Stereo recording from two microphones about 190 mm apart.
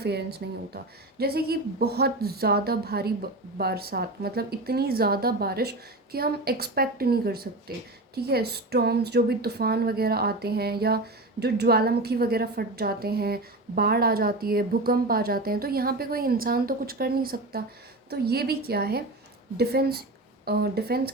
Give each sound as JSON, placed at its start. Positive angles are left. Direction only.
{"t": 0.0, "sound": "a woman's voice", "side_deg": -60}